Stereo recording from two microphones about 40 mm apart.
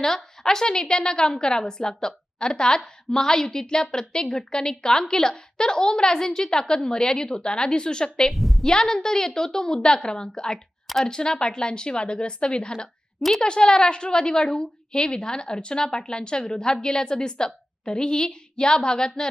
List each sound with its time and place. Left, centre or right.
0.0 s a woman's voice: centre
8.3 s a sound: centre
8.6 s a woman's voice: centre